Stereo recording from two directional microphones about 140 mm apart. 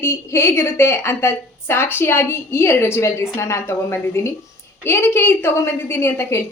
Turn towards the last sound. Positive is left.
turn(degrees=15)  # may be behind; listen again after turning